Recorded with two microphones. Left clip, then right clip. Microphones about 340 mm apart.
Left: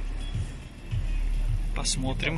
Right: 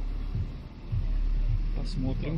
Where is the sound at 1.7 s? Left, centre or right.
Left.